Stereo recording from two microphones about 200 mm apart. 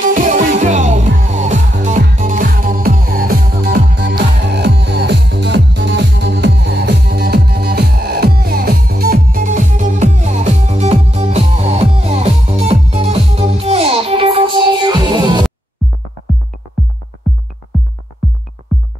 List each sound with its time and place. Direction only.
0.0 s music: 40° right (ahead or behind); by 15.4 s 20° right (ahead or behind)